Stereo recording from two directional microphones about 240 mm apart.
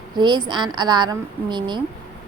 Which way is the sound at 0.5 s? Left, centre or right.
Centre.